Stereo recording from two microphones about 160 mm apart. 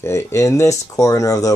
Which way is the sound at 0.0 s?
20° left (ahead or behind).